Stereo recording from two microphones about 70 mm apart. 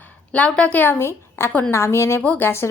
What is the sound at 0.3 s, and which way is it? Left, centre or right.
A woman's voice, centre.